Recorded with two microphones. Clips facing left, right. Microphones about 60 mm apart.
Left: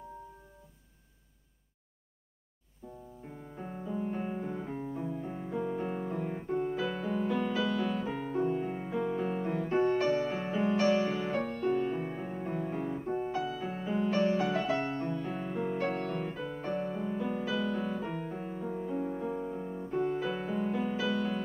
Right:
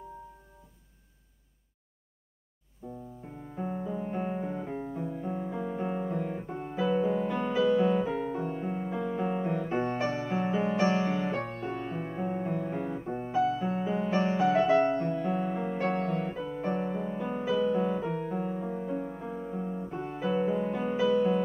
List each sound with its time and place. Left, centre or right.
3.5 s music: centre
8.0 s music: centre
9.2 s music: centre
10.9 s music: centre
11.8 s music: centre
12.1 s music: right
12.4 s music: centre
18.0 s music: centre
18.4 s music: centre